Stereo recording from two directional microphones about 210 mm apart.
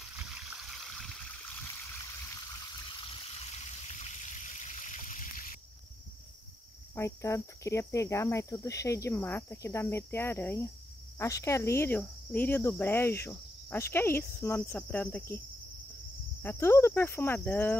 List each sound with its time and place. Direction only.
0.7 s stream: centre (ahead or behind)
3.5 s stream: 30° left (ahead or behind)
7.0 s speech: 15° left (ahead or behind)
16.4 s speech: 10° left (ahead or behind)